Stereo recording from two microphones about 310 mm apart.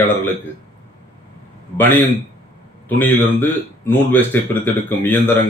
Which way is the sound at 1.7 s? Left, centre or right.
Centre.